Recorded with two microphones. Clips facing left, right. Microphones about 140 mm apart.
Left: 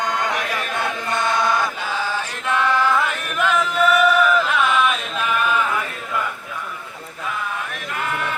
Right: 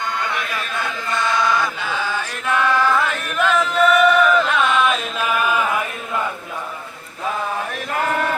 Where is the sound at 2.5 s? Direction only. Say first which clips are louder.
Right 1 dB; 20° left (ahead or behind); by 5.8 s 10° right (ahead or behind).